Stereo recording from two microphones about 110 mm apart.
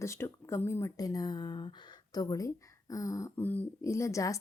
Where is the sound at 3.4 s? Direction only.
15° left (ahead or behind).